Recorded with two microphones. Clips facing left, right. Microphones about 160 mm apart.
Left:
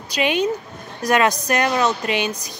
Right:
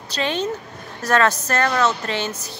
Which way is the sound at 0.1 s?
15° left (ahead or behind).